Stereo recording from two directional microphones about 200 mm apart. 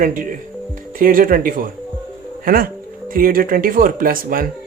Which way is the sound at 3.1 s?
45° right (ahead or behind).